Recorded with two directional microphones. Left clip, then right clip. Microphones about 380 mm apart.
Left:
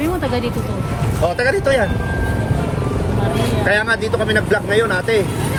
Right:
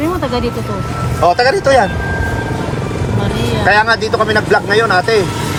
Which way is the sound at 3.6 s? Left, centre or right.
Centre.